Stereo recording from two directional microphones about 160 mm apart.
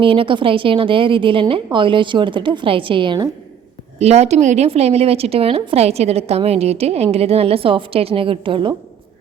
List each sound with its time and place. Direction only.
0.0 s a woman's voice: 35° right (ahead or behind)
3.9 s a woman's voice: 40° right (ahead or behind)